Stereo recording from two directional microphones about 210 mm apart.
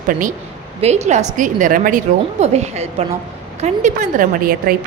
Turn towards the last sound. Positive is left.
turn(degrees=-45)  # may be behind; listen again after turning